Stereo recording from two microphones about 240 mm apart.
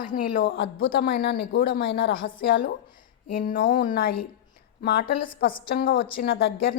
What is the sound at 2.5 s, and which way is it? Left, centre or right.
Speech, left.